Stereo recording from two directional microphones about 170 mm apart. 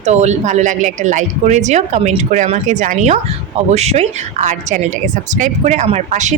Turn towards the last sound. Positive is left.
turn(degrees=-45)  # may be behind; listen again after turning